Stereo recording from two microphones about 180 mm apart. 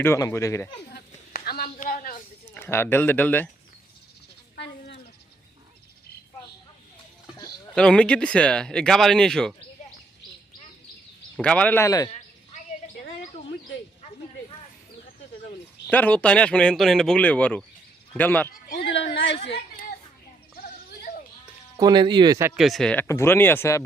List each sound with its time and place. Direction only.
0.0 s speech: 15° left (ahead or behind)
0.9 s a sound: 60° left (ahead or behind)
1.6 s a woman's voice: 50° left (ahead or behind)
2.6 s speech: 15° left (ahead or behind)
7.3 s a sound: 20° left (ahead or behind)
7.8 s speech: 5° left (ahead or behind)
11.3 s speech: 5° left (ahead or behind)
15.9 s speech: 10° left (ahead or behind)
18.5 s speech: 50° left (ahead or behind)
19.4 s a child's voice: 35° left (ahead or behind)
21.0 s a sound: 50° left (ahead or behind)
21.8 s speech: 25° right (ahead or behind)
22.5 s speech: centre (ahead or behind)